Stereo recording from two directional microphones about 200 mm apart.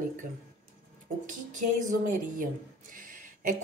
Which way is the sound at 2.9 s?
40° right (ahead or behind).